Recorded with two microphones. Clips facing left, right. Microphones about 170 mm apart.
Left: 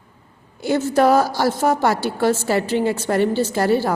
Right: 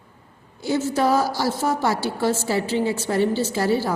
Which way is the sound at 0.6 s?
60° left (ahead or behind).